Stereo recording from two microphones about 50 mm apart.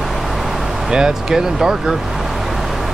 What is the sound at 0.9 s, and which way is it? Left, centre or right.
Speech, centre.